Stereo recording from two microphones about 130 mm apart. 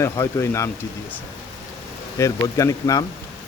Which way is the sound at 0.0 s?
20° left (ahead or behind).